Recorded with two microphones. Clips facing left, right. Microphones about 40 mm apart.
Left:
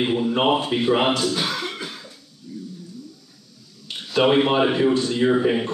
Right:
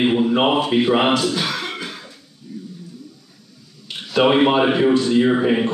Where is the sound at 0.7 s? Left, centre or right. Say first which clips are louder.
Right 3 dB; right.